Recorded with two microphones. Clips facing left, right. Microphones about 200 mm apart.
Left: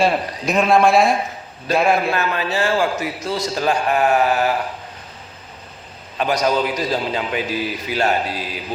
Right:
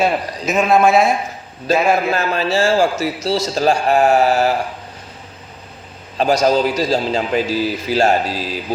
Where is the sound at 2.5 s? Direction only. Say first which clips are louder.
Right 5 dB; 45° right (ahead or behind).